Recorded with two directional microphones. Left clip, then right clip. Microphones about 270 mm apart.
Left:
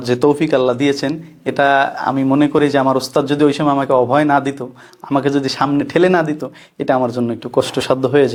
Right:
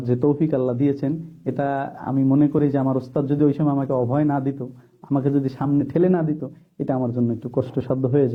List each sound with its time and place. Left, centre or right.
0.0 s speech: centre
7.6 s speech: centre